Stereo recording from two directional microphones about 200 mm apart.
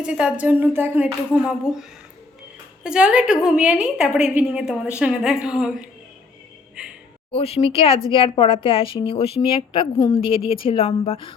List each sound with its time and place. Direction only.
0.0 s a woman's voice: 5° right (ahead or behind)
7.3 s speech: 30° left (ahead or behind)